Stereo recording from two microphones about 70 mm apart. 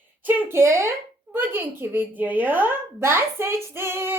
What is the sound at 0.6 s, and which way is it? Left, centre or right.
A child's voice, right.